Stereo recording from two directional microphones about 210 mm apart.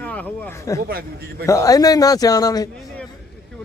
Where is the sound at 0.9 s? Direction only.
45° right (ahead or behind).